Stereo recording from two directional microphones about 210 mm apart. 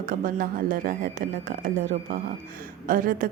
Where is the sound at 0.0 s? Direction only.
40° right (ahead or behind).